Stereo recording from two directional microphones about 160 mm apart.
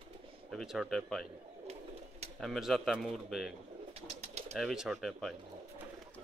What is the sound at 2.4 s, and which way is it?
Speech, centre (ahead or behind).